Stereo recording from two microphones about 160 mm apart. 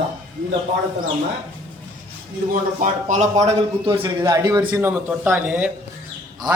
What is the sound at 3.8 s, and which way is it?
Speech, 30° right (ahead or behind).